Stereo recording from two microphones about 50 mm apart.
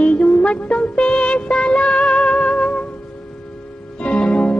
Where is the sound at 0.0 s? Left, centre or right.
Left.